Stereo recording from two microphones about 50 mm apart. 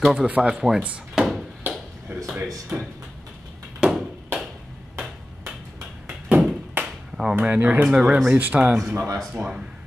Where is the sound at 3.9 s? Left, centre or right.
Centre.